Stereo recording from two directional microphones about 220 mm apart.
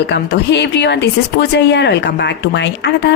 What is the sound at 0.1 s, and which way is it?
Speech, 50° left (ahead or behind).